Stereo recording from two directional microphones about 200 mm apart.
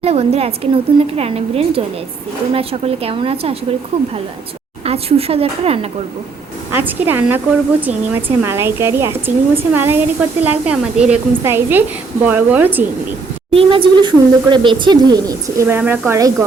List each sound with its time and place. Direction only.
0.0 s a woman's voice: 30° right (ahead or behind)
4.9 s a woman's voice: 30° right (ahead or behind)
6.7 s speech: 10° right (ahead or behind)
13.5 s a woman's voice: 25° right (ahead or behind)